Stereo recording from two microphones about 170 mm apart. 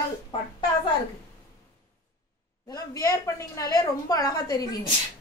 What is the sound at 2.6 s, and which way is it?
A woman's voice, 20° left (ahead or behind).